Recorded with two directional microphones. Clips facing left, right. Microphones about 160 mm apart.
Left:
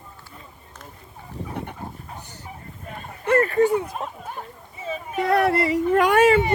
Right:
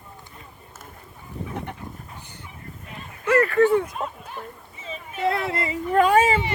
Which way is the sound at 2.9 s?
50° left (ahead or behind).